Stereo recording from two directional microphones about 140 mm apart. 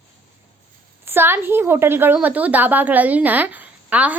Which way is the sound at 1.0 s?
15° right (ahead or behind).